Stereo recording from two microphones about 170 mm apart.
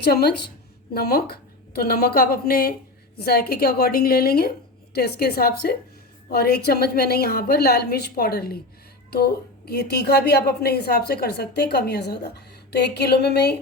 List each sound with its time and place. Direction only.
0.0 s a woman's voice: 70° left (ahead or behind)